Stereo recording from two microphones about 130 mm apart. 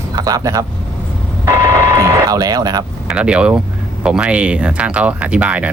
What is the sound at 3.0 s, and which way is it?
Speech, 5° right (ahead or behind).